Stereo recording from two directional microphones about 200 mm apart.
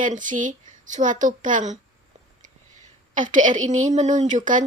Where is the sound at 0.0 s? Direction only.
40° right (ahead or behind).